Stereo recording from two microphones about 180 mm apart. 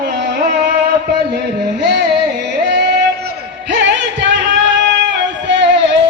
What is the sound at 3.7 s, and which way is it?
Music, 85° right.